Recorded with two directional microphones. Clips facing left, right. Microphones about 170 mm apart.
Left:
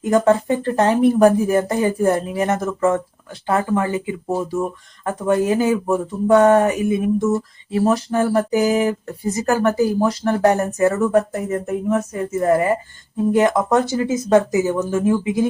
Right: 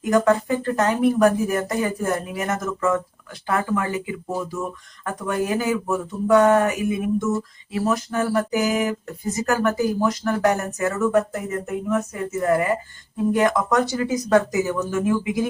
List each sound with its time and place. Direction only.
0.0 s speech: 25° left (ahead or behind)